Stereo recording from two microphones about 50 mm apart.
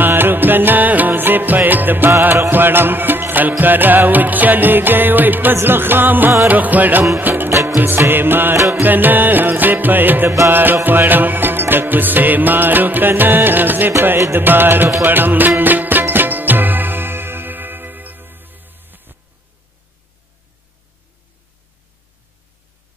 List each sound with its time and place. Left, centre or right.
0.0 s music: right
8.5 s music: right
8.8 s music: right